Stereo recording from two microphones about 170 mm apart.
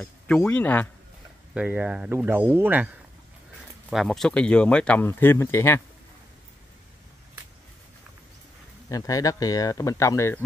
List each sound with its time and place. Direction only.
0.0 s speech: 5° left (ahead or behind)
1.5 s speech: 5° right (ahead or behind)
3.9 s speech: centre (ahead or behind)
8.8 s speech: 20° left (ahead or behind)